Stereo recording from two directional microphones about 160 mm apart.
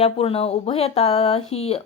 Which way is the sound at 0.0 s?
35° left (ahead or behind).